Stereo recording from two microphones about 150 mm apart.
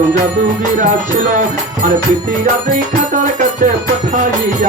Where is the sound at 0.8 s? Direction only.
60° right (ahead or behind).